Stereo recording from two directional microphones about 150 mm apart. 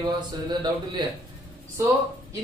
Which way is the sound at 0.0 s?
30° right (ahead or behind).